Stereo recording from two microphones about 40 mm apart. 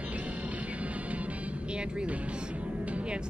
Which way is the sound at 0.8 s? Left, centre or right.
Right.